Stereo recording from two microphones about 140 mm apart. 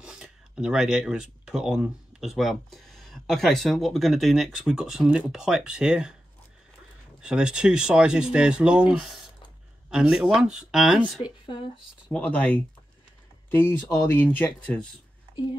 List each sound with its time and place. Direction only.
0.0 s speech: 5° right (ahead or behind)
7.2 s speech: 5° right (ahead or behind)
9.8 s speech: 5° right (ahead or behind)
11.2 s speech: 35° left (ahead or behind)
12.1 s speech: 10° left (ahead or behind)